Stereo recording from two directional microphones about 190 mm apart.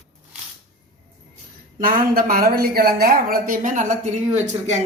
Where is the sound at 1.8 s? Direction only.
50° right (ahead or behind).